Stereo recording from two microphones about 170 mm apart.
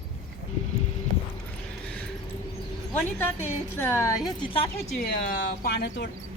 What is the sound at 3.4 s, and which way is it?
A woman's voice, 10° left (ahead or behind).